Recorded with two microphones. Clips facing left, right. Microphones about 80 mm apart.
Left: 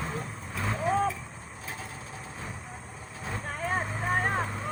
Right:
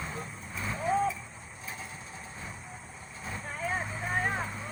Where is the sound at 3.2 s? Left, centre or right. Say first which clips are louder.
Left 2 dB; left.